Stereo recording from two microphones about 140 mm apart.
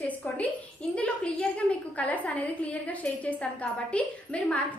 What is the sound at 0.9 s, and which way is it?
A woman's voice, 5° left (ahead or behind).